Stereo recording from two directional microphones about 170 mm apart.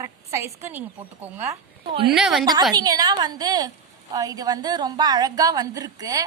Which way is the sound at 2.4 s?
25° right (ahead or behind).